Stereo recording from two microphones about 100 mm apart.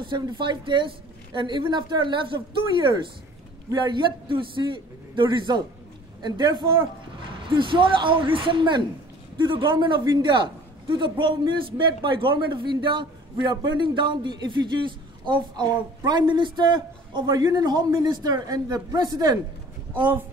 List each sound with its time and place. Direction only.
0.0 s a man's voice: 55° right (ahead or behind)